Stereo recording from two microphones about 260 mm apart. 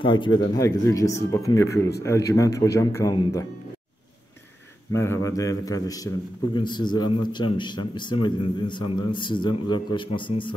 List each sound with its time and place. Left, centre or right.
0.0 s speech: centre
4.9 s speech: centre